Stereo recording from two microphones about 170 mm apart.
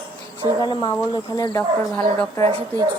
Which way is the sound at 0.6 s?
25° left (ahead or behind).